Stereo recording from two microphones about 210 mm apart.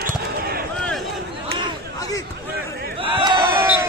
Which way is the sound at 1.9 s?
15° left (ahead or behind).